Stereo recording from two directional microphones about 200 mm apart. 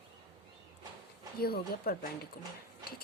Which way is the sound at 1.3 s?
50° left (ahead or behind).